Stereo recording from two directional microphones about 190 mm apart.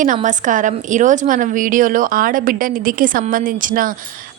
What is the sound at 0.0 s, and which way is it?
Speech, 40° right (ahead or behind).